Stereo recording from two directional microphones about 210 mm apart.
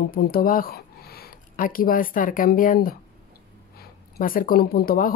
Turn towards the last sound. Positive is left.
turn(degrees=45)  # may be behind; listen again after turning